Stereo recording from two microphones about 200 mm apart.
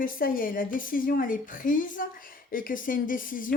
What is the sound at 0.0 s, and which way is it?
A woman's voice, 45° left (ahead or behind).